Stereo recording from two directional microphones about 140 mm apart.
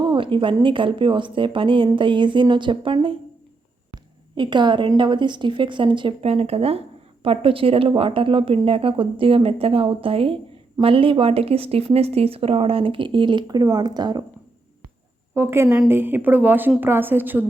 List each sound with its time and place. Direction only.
0.0 s a sound: 35° right (ahead or behind)
0.6 s a woman's voice: 35° right (ahead or behind)
4.4 s a woman's voice: 35° right (ahead or behind)
15.4 s a woman's voice: 15° right (ahead or behind)